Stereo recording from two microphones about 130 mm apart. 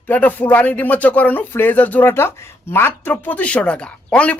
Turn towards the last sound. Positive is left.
turn(degrees=10)  # may be behind; listen again after turning